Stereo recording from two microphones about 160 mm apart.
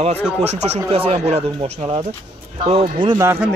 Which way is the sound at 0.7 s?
35° right (ahead or behind).